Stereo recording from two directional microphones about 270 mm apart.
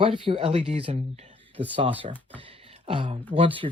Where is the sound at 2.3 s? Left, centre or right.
Right.